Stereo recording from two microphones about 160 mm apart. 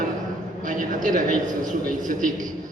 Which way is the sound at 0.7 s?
55° right (ahead or behind).